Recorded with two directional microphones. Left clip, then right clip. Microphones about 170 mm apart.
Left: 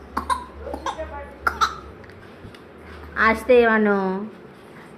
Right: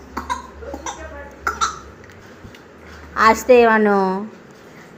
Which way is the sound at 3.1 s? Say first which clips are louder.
Right 4 dB; 25° right (ahead or behind).